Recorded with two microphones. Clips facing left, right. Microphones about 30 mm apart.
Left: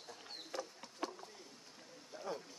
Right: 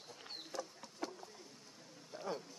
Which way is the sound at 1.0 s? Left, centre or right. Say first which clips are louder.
Left 1 dB; left.